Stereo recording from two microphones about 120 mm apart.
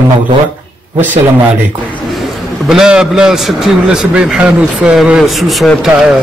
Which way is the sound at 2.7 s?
5° right (ahead or behind).